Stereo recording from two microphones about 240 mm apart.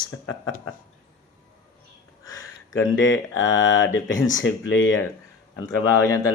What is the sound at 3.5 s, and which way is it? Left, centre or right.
Speech, left.